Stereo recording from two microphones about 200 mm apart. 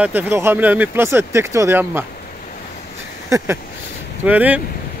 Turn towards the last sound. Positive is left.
turn(degrees=-10)  # may be behind; listen again after turning